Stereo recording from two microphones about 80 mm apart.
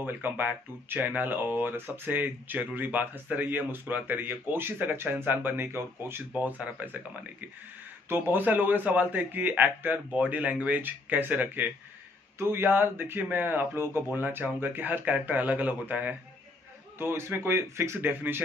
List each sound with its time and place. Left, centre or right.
0.0 s speech: right
6.3 s speech: centre
8.1 s speech: right
17.0 s speech: right